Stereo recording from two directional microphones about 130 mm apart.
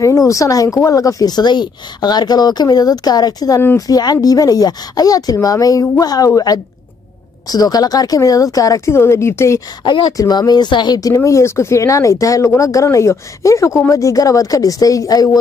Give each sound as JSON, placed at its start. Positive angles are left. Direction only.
{"t": 0.3, "sound": "speech", "side_deg": 25}